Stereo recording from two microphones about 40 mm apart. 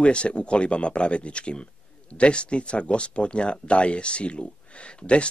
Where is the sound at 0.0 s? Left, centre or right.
Left.